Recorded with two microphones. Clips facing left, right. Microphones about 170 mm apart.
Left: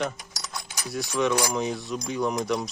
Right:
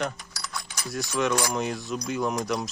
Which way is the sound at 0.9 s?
Centre (ahead or behind).